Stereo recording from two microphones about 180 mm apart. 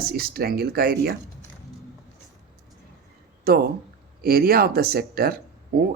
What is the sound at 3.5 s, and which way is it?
Speech, 55° right (ahead or behind).